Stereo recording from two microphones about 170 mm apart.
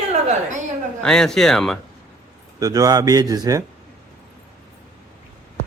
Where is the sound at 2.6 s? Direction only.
20° right (ahead or behind).